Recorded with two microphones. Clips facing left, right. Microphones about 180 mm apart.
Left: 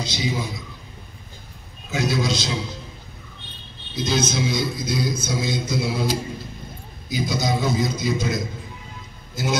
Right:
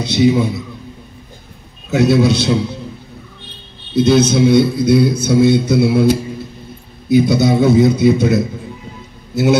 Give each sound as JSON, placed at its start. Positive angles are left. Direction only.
{"t": 0.0, "sound": "a man's voice", "side_deg": -65}
{"t": 1.9, "sound": "a man's voice", "side_deg": -65}
{"t": 3.9, "sound": "a man's voice", "side_deg": -65}